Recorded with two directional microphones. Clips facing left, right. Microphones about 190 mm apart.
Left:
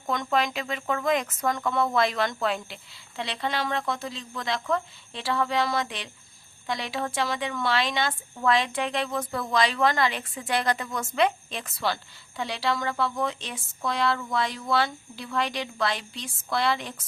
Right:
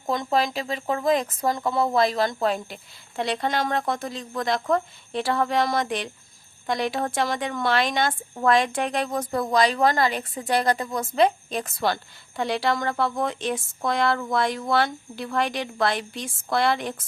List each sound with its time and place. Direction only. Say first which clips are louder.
0.1 s a woman's voice: right 3 dB; 35° right (ahead or behind); by 16.9 s 50° right (ahead or behind)